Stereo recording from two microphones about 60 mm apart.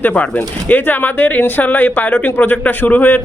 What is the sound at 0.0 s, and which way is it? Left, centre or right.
Speech, left.